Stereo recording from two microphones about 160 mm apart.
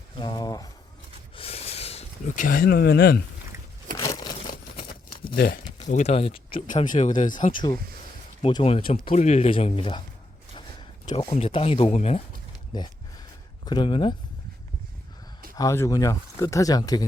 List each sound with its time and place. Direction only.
0.2 s speech: 30° left (ahead or behind)
1.4 s a sound: 40° left (ahead or behind); by 3.2 s 70° left (ahead or behind)
3.9 s a sound: 20° left (ahead or behind)
5.2 s a sound: 65° left (ahead or behind)
5.7 s speech: 45° left (ahead or behind)
6.7 s speech: 55° left (ahead or behind)
8.4 s speech: 35° left (ahead or behind)
11.3 s speech: 40° left (ahead or behind)
12.7 s speech: 25° left (ahead or behind)
15.5 s speech: 20° left (ahead or behind)